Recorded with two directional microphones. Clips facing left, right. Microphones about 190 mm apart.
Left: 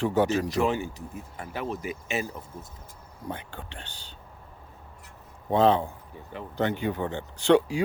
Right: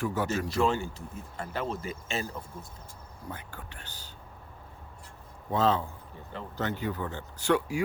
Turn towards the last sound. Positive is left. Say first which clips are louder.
# left 6 dB
turn(degrees=30)  # may be behind; listen again after turning